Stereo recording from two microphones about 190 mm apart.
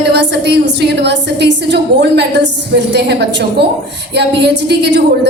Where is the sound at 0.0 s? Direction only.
65° right (ahead or behind).